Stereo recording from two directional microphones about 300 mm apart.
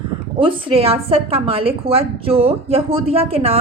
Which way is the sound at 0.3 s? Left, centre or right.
Centre.